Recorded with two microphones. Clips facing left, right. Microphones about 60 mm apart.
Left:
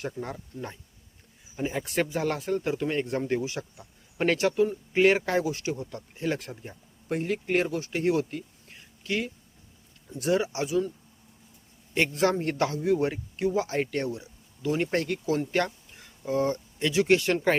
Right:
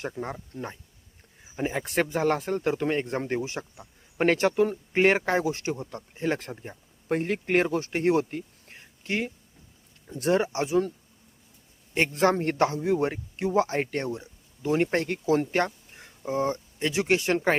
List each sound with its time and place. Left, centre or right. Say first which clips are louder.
0.0 s speech: right 1 dB; right
1.5 s speech: right 1 dB; right
7.1 s speech: right 2 dB; right
12.1 s speech: right 5 dB; right
15.9 s a sound: right 2 dB; right
16.2 s speech: left 1 dB; right